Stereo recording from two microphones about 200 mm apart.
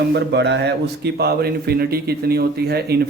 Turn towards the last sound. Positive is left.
turn(degrees=-55)  # may be behind; listen again after turning